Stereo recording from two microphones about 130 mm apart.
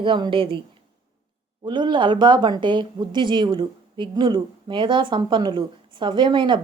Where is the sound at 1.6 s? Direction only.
35° right (ahead or behind).